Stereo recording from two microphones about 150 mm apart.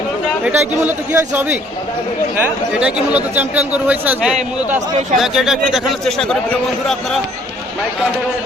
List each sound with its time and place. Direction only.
0.4 s speech: 15° right (ahead or behind)